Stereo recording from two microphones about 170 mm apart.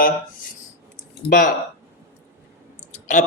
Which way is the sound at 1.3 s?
50° left (ahead or behind).